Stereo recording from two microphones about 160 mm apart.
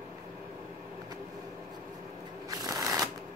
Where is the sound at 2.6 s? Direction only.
20° right (ahead or behind).